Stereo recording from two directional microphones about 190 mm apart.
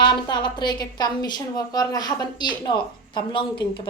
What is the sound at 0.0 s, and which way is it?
A woman's voice, 25° left (ahead or behind).